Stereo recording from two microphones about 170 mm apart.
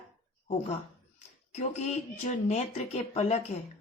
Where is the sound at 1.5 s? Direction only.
40° left (ahead or behind).